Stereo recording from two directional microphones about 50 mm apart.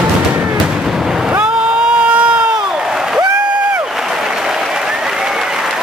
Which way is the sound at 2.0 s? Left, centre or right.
Right.